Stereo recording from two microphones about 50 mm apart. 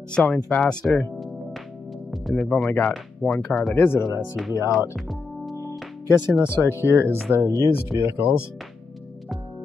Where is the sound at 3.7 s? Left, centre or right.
Left.